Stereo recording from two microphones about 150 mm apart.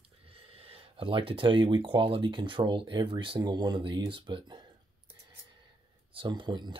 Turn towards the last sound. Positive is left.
turn(degrees=-30)  # may be behind; listen again after turning